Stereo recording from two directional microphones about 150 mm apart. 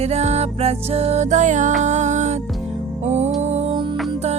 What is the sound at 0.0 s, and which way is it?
Music, 45° right (ahead or behind).